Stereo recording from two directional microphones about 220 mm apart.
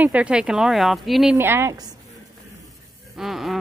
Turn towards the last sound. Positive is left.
turn(degrees=0)  # may be behind; listen again after turning